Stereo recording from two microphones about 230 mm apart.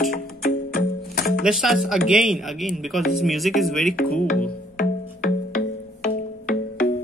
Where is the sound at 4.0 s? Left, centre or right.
Left.